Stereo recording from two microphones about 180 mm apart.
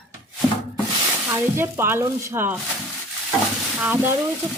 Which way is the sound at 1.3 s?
15° right (ahead or behind).